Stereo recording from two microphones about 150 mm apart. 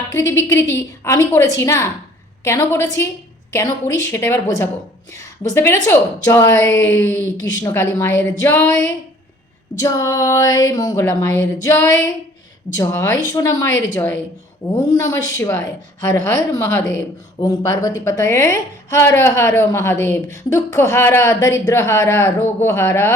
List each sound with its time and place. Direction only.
0.1 s a woman's voice: 20° left (ahead or behind)